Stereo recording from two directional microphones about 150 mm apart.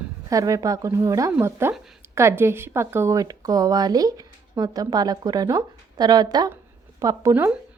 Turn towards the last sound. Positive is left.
turn(degrees=-15)  # may be behind; listen again after turning